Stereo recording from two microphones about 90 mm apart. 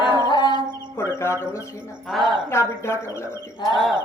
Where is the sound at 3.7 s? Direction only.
Centre (ahead or behind).